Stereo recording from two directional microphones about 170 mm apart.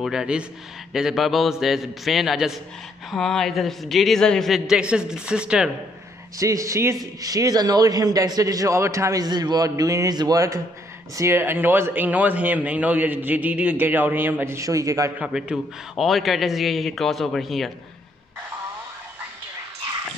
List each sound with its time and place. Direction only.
0.0 s a man's voice: 5° right (ahead or behind)
6.3 s a man's voice: 20° right (ahead or behind)
15.1 s a man's voice: 5° right (ahead or behind)